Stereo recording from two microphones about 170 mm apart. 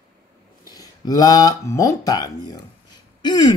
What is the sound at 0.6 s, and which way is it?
Speech, 20° left (ahead or behind).